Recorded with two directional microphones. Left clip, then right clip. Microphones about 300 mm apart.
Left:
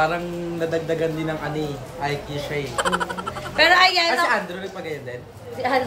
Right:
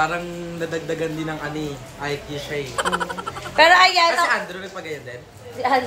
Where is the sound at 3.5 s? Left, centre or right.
Centre.